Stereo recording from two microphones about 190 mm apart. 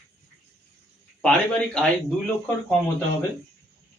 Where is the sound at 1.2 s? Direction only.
5° left (ahead or behind).